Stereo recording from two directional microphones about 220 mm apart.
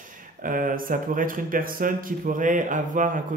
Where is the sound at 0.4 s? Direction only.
40° right (ahead or behind).